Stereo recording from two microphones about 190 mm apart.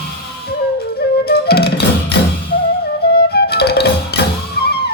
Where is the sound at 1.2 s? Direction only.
55° left (ahead or behind).